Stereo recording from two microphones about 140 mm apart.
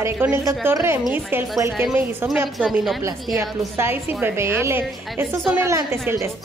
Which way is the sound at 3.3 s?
15° right (ahead or behind).